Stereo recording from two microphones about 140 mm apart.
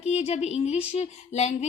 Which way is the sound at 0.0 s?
50° left (ahead or behind).